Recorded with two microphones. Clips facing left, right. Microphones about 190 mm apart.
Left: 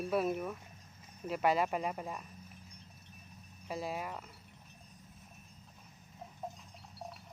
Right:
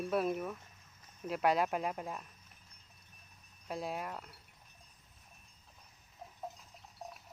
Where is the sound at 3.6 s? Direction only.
Centre (ahead or behind).